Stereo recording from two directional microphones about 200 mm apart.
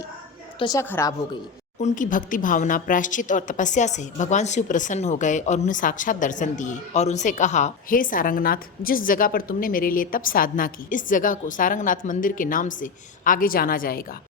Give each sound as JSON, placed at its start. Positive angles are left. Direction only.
{"t": 0.6, "sound": "a woman's voice", "side_deg": 15}
{"t": 1.8, "sound": "a woman's voice", "side_deg": 40}